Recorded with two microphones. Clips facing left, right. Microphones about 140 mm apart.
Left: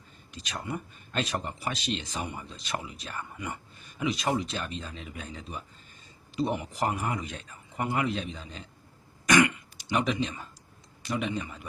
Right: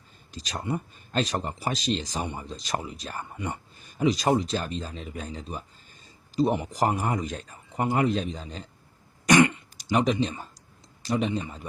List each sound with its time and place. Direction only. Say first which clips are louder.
0.3 s speech: right 4 dB; 35° right (ahead or behind)
9.2 s throat clearing: right 3 dB; 30° right (ahead or behind)
11.0 s speech: right 4 dB; 35° right (ahead or behind)